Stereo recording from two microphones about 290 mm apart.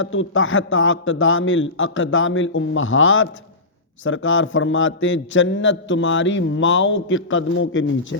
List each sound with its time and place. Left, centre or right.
0.0 s a man's voice: left